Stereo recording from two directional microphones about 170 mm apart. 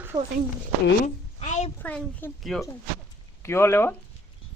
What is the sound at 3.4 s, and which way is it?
Speech, 15° left (ahead or behind).